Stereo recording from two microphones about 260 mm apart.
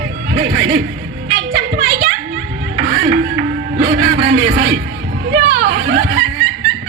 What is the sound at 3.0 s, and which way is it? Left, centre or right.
Speech, right.